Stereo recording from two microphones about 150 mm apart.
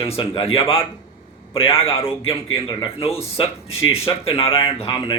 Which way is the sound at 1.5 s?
40° left (ahead or behind).